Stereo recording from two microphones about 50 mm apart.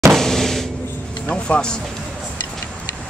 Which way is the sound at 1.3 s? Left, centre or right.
Left.